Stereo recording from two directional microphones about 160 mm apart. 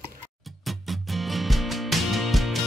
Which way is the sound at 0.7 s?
Centre (ahead or behind).